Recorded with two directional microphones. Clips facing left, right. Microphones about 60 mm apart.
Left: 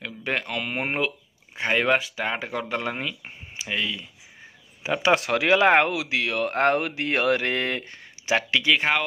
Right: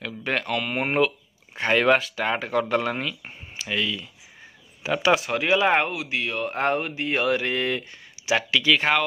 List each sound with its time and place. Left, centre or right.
0.3 s speech: centre
5.1 s speech: left
5.9 s speech: left
8.7 s speech: centre